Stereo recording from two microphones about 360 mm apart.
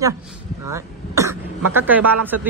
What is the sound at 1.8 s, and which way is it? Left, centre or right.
Speech, centre.